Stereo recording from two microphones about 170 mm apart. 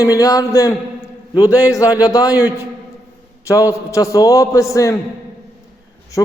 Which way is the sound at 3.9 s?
20° left (ahead or behind).